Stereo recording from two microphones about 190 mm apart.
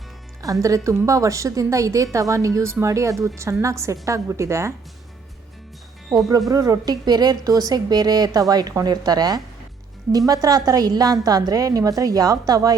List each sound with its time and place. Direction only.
0.6 s a woman's voice: 15° right (ahead or behind)
6.1 s a woman's voice: 20° right (ahead or behind)